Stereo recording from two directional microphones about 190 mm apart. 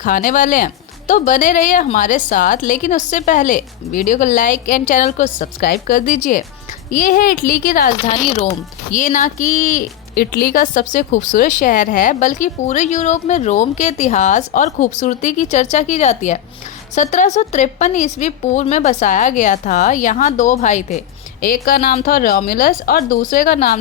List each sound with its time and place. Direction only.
0.0 s speech: 45° left (ahead or behind)
21.4 s speech: 50° left (ahead or behind)